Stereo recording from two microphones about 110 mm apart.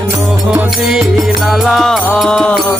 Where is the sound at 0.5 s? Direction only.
10° right (ahead or behind).